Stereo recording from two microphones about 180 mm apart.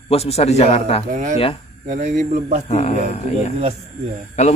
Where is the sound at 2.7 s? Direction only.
40° left (ahead or behind).